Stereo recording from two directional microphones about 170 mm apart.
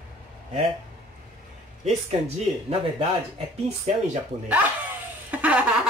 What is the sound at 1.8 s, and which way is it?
Speech, 35° right (ahead or behind).